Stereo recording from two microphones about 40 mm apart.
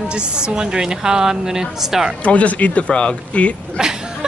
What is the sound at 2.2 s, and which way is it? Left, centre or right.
Speech, left.